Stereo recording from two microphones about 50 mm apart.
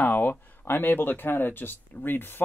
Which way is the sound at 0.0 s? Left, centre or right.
Left.